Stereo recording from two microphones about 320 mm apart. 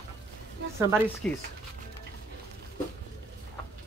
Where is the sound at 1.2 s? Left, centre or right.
Centre.